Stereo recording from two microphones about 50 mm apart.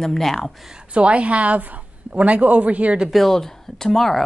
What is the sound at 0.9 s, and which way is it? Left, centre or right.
A woman's voice, right.